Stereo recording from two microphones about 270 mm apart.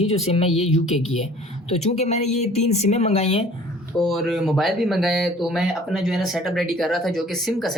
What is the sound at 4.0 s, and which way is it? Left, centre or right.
Speech, centre.